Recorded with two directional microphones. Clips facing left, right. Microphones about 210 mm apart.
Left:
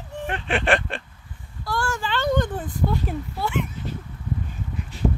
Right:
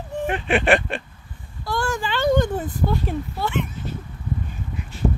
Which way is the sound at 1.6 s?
20° right (ahead or behind).